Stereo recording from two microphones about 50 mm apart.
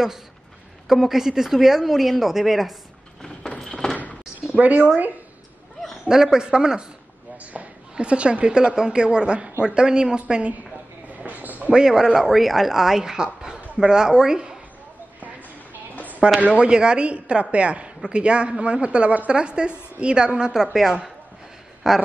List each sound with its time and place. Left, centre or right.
0.8 s speech: centre
3.2 s a sound: centre
4.4 s a sound: right
6.0 s a woman's voice: centre
11.1 s a sound: right
11.7 s a woman's voice: centre
12.1 s a woman's voice: centre
16.3 s a woman's voice: right
20.7 s a woman's voice: centre